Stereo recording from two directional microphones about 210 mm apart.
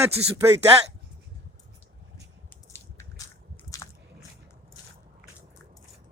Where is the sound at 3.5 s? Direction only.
15° left (ahead or behind).